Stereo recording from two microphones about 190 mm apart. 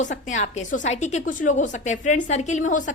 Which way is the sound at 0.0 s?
40° left (ahead or behind).